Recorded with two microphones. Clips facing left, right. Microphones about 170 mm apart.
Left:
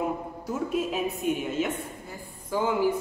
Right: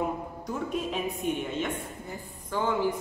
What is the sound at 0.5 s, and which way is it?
A woman's voice, 5° left (ahead or behind).